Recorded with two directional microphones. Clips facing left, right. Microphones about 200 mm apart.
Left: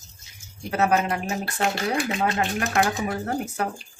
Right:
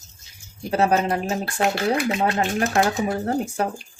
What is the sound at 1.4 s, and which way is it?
Stir, centre (ahead or behind).